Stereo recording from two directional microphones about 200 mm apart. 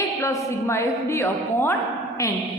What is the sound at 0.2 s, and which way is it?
A woman's voice, 15° left (ahead or behind).